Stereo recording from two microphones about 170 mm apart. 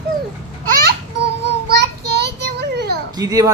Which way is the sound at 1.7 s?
75° right (ahead or behind).